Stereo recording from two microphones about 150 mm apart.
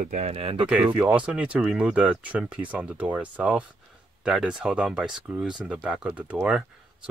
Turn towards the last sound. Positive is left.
turn(degrees=-5)  # may be behind; listen again after turning